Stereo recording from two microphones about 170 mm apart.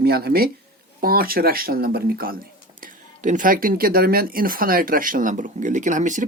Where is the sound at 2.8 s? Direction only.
50° right (ahead or behind).